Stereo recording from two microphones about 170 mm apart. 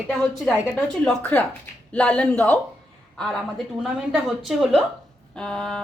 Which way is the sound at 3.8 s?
5° right (ahead or behind).